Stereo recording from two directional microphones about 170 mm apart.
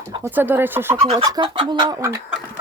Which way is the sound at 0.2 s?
10° right (ahead or behind).